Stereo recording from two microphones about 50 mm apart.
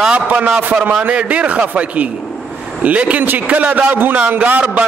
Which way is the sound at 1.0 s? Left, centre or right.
Right.